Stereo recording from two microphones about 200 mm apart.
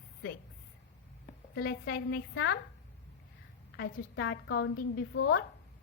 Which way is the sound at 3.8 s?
60° left (ahead or behind).